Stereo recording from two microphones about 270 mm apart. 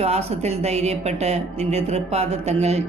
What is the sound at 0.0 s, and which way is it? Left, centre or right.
Speech, right.